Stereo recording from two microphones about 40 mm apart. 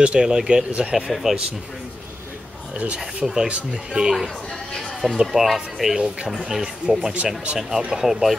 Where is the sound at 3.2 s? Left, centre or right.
Centre.